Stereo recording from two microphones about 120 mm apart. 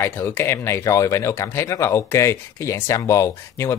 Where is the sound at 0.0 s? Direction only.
20° left (ahead or behind).